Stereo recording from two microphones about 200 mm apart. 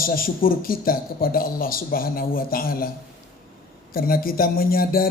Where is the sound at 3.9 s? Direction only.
45° left (ahead or behind).